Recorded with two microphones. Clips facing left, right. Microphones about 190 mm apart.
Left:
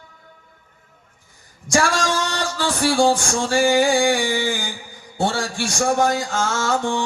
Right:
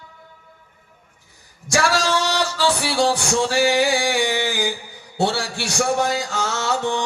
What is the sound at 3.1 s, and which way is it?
Mantra, 65° right (ahead or behind).